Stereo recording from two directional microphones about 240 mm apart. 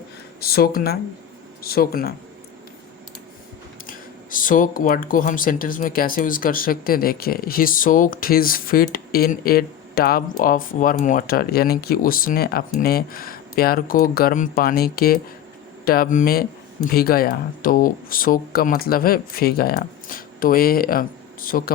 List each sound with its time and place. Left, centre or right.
0.3 s speech: left
3.8 s speech: left